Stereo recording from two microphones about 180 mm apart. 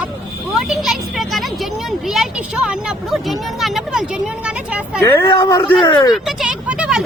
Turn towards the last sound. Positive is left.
turn(degrees=-5)  # may be behind; listen again after turning